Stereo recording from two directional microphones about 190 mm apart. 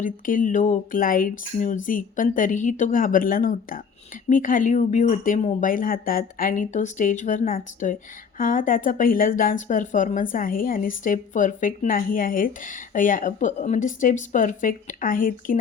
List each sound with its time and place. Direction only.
0.0 s speech: 45° left (ahead or behind)